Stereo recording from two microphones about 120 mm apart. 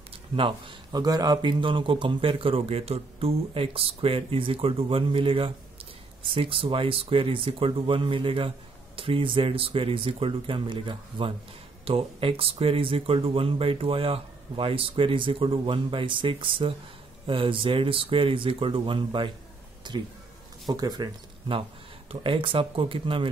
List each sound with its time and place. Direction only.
0.4 s a man's voice: 45° right (ahead or behind)
22.1 s a man's voice: 45° right (ahead or behind)